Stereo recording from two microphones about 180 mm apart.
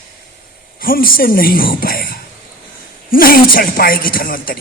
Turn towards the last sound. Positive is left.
turn(degrees=50)  # may be behind; listen again after turning